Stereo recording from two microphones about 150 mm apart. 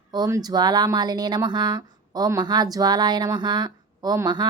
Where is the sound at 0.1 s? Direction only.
25° right (ahead or behind).